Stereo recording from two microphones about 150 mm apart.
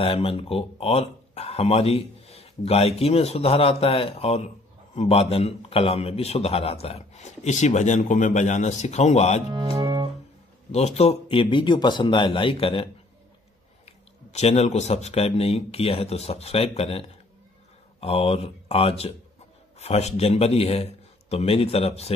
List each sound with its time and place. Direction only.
0.0 s speech: 40° left (ahead or behind)
9.5 s speech: 30° right (ahead or behind)
10.7 s speech: 45° left (ahead or behind)
14.3 s speech: 45° left (ahead or behind)
18.0 s speech: 40° left (ahead or behind)